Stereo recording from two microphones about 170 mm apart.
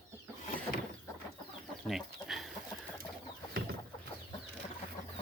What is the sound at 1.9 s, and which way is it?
Chicken, centre (ahead or behind).